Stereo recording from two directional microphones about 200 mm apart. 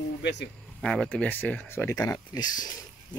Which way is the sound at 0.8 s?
Centre (ahead or behind).